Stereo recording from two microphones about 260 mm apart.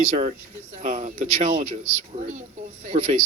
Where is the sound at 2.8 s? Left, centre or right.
Right.